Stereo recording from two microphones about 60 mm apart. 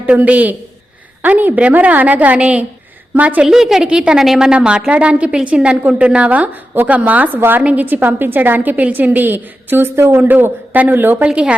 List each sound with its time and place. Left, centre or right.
0.0 s a woman's voice: right
3.4 s a woman's voice: centre; by 11.2 s right
11.3 s a woman's voice: centre